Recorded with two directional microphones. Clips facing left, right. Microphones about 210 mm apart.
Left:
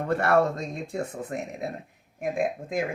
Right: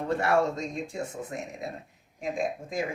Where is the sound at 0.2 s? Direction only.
55° left (ahead or behind).